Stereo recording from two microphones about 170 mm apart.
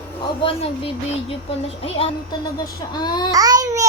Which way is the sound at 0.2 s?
30° left (ahead or behind).